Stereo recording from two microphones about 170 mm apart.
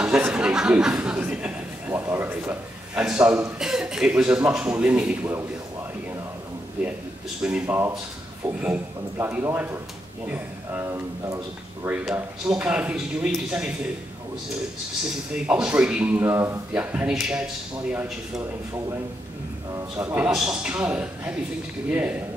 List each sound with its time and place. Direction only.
0.0 s a sound: 5° right (ahead or behind)
4.5 s a man's voice: 5° right (ahead or behind)
7.4 s a man's voice: 10° right (ahead or behind)
15.3 s a man's voice: 5° right (ahead or behind)
20.0 s a man's voice: 15° right (ahead or behind)
20.2 s a man's voice: 5° right (ahead or behind)